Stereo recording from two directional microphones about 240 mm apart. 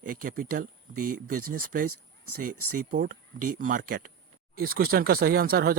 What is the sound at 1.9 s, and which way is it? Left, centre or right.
Speech, right.